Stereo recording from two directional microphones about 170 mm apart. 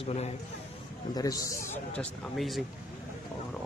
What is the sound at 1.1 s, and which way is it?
Speech, 20° left (ahead or behind).